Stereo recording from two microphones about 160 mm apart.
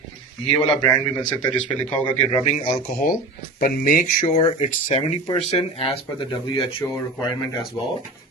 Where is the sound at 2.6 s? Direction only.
60° left (ahead or behind).